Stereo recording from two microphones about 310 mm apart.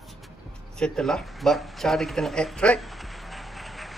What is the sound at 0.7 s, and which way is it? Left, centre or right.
Speech, centre.